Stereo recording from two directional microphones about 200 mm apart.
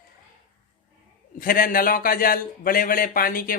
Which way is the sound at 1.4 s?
45° left (ahead or behind).